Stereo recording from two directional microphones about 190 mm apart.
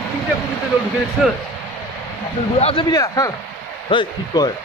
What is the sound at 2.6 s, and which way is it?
A woman's voice, 30° left (ahead or behind).